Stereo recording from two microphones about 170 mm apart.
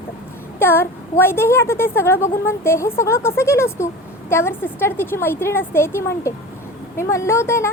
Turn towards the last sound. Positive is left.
turn(degrees=15)  # may be behind; listen again after turning